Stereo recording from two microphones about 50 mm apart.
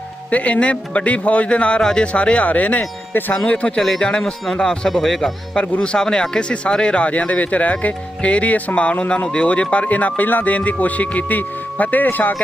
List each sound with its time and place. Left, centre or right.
0.3 s speech: left; by 2.0 s centre
2.1 s speech: left
3.1 s speech: left
3.4 s speech: left
3.8 s speech: centre
5.8 s speech: centre; by 12.4 s left